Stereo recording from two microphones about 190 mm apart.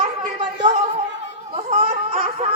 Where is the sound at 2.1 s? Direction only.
30° right (ahead or behind).